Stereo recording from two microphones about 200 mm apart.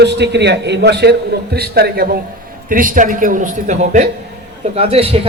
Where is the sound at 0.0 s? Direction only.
60° right (ahead or behind).